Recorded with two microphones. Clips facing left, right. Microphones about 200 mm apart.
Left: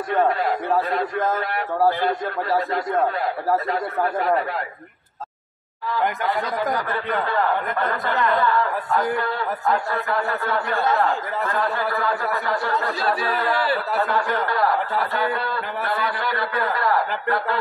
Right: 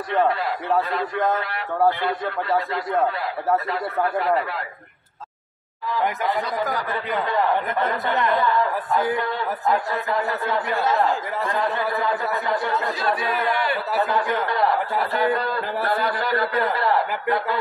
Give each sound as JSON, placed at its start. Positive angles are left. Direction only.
{"t": 3.4, "sound": "a man's voice", "side_deg": 0}
{"t": 6.9, "sound": "a man's voice", "side_deg": 0}
{"t": 8.1, "sound": "speech", "side_deg": -20}
{"t": 10.0, "sound": "speech", "side_deg": -20}
{"t": 10.7, "sound": "a man's voice", "side_deg": 0}
{"t": 11.4, "sound": "speech", "side_deg": -20}
{"t": 13.3, "sound": "speech", "side_deg": 35}
{"t": 14.0, "sound": "speech", "side_deg": -15}
{"t": 15.1, "sound": "a man's voice", "side_deg": -30}
{"t": 15.9, "sound": "a man's voice", "side_deg": -45}
{"t": 16.5, "sound": "speech", "side_deg": -25}